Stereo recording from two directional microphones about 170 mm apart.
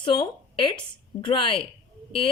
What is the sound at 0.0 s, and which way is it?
A woman's voice, 25° left (ahead or behind).